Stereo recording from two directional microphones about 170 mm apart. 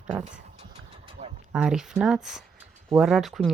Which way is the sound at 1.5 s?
5° right (ahead or behind).